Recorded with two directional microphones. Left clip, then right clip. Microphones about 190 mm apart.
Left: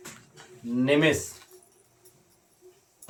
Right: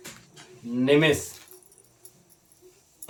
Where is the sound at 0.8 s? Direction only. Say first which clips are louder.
Right 2 dB; 15° right (ahead or behind).